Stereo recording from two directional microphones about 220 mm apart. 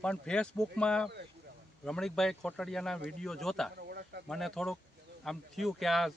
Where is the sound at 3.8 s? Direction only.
45° right (ahead or behind).